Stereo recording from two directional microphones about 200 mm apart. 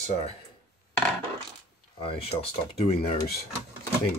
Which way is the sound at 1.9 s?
25° left (ahead or behind).